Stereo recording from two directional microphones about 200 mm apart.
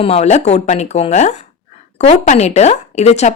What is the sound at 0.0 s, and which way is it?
Speech, 30° left (ahead or behind).